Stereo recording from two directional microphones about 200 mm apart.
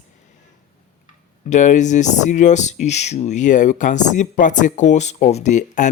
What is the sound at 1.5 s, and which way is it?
Speech, 40° left (ahead or behind).